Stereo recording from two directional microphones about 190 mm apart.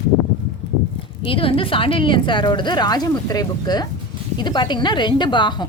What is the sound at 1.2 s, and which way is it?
Speech, 30° left (ahead or behind).